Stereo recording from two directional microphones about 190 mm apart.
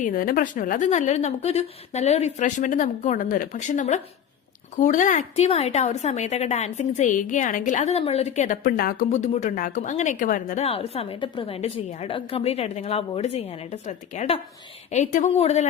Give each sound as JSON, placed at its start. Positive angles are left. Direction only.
{"t": 0.0, "sound": "a woman's voice", "side_deg": 50}
{"t": 10.6, "sound": "a woman's voice", "side_deg": 30}